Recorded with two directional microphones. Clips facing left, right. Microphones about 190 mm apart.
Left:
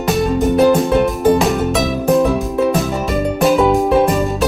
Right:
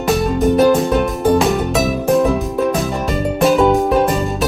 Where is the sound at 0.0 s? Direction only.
Centre (ahead or behind).